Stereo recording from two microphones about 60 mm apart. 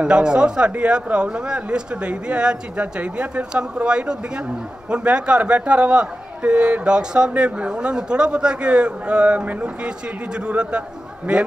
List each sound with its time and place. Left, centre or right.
0.0 s a man's voice: centre